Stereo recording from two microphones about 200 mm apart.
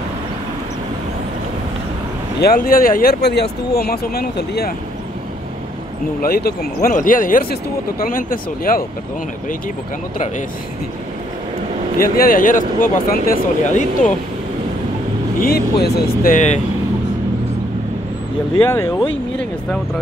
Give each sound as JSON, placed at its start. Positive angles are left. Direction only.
{"t": 2.5, "sound": "speech", "side_deg": 45}
{"t": 6.2, "sound": "speech", "side_deg": 50}
{"t": 12.0, "sound": "speech", "side_deg": 45}
{"t": 15.4, "sound": "speech", "side_deg": 50}
{"t": 18.7, "sound": "speech", "side_deg": 15}